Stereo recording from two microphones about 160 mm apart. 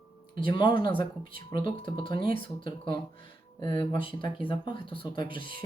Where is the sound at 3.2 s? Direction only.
30° left (ahead or behind).